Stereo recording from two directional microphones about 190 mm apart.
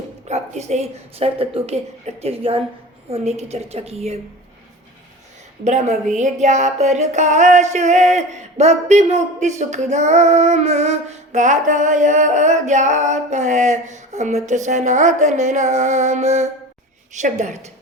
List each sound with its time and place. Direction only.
0.3 s speech: 35° right (ahead or behind)
5.6 s speech: 40° right (ahead or behind)